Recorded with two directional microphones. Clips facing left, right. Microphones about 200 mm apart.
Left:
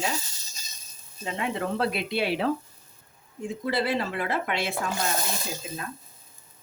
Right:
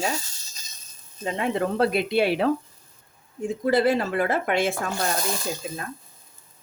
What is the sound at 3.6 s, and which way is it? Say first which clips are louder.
Speech: right 6 dB; 45° right (ahead or behind).